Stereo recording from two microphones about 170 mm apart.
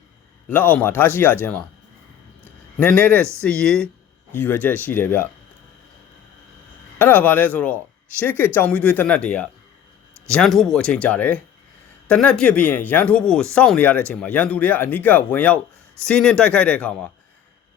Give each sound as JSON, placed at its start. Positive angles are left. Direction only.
{"t": 0.4, "sound": "speech", "side_deg": 10}
{"t": 2.8, "sound": "speech", "side_deg": 10}
{"t": 7.0, "sound": "speech", "side_deg": 10}